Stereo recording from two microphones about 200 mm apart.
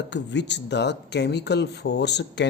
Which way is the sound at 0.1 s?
60° left (ahead or behind).